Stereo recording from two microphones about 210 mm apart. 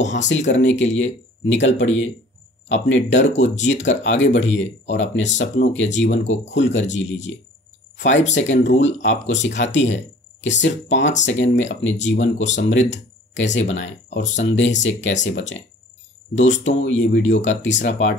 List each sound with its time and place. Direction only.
0.1 s speech: 60° left (ahead or behind)
8.1 s speech: 35° left (ahead or behind)
8.4 s speech: 60° left (ahead or behind)